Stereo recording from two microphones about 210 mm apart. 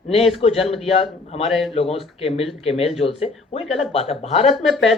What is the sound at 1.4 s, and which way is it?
Speech, centre (ahead or behind).